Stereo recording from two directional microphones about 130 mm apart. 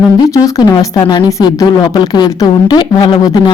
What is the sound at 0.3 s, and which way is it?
A woman's voice, 25° left (ahead or behind).